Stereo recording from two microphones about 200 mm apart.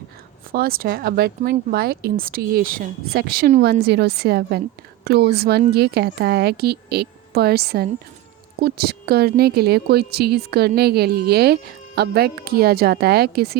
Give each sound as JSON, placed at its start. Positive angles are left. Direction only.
{"t": 0.5, "sound": "a woman's voice", "side_deg": -45}